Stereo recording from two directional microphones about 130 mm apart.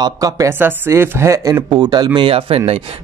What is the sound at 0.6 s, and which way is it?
A man's voice, 20° right (ahead or behind).